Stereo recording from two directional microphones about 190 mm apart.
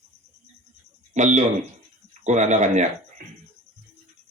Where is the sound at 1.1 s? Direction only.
40° right (ahead or behind).